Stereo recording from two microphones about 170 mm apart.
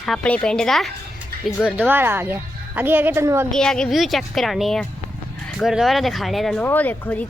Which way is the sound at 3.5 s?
5° left (ahead or behind).